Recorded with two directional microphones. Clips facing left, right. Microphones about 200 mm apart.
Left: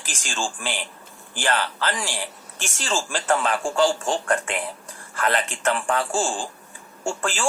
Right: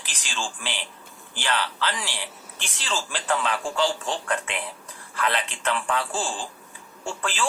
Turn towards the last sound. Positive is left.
turn(degrees=45)  # may be behind; listen again after turning